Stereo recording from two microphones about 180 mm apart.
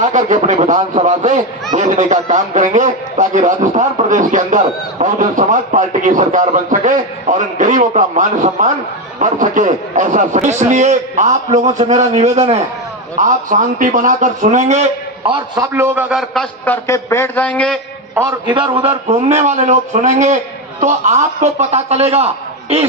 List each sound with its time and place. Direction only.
0.0 s a man's voice: 40° right (ahead or behind)
15.3 s a man's voice: 25° right (ahead or behind)
15.7 s a man's voice: 15° right (ahead or behind); by 17.7 s 5° left (ahead or behind)
18.1 s a man's voice: 15° right (ahead or behind); by 22.3 s 35° right (ahead or behind)